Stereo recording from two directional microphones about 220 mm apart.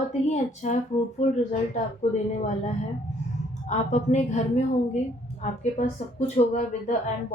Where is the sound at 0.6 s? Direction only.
35° left (ahead or behind).